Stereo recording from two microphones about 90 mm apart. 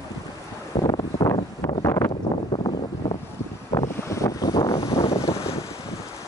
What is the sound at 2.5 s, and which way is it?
Wind noise, 90° left.